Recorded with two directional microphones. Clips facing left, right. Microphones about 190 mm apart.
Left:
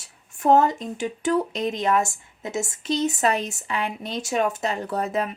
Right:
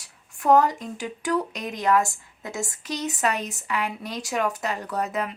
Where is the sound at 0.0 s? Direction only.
25° left (ahead or behind).